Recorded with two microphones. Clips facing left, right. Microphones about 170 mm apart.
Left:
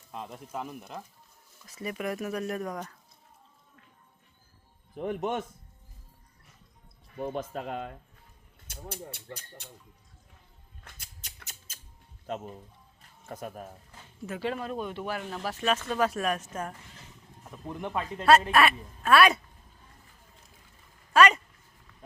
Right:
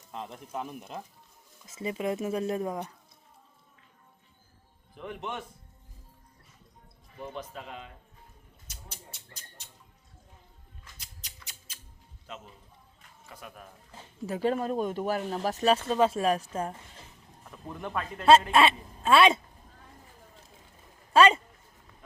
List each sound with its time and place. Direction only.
0.1 s speech: 10° left (ahead or behind)
0.8 s speech: 5° right (ahead or behind)
1.6 s speech: 25° right (ahead or behind)
4.9 s speech: 45° left (ahead or behind)
7.2 s speech: 50° left (ahead or behind)
10.8 s scissors: 55° left (ahead or behind)
12.2 s speech: 45° left (ahead or behind)
13.0 s music: 45° left (ahead or behind)
14.3 s speech: 40° right (ahead or behind)
17.7 s speech: 20° left (ahead or behind)
18.3 s speech: 25° right (ahead or behind)
21.1 s speech: 30° right (ahead or behind)